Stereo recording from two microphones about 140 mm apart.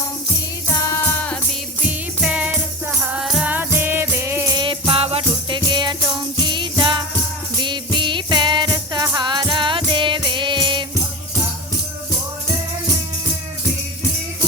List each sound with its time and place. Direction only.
0.7 s music: 25° left (ahead or behind)
1.9 s music: 10° right (ahead or behind)
4.5 s music: 35° right (ahead or behind)
6.4 s jingle bell: 35° right (ahead or behind)
7.6 s music: 35° right (ahead or behind)